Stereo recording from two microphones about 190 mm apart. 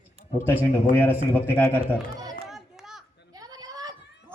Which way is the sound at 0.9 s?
10° left (ahead or behind).